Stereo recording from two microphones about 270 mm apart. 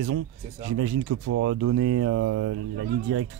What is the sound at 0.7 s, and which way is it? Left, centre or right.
Speech, right.